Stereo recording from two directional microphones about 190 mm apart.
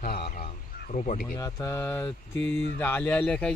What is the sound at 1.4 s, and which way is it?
Speech, 15° left (ahead or behind).